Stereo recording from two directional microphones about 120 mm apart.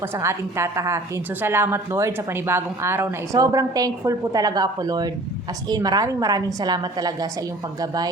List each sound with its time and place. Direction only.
0.0 s a woman's voice: 20° right (ahead or behind)